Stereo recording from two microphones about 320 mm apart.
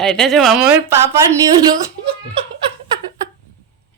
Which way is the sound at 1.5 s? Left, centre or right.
Centre.